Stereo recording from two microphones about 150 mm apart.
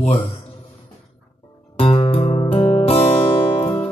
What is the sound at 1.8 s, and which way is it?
Music, 40° left (ahead or behind).